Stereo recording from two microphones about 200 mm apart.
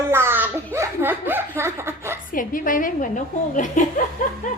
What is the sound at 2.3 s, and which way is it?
A woman's voice, 45° left (ahead or behind).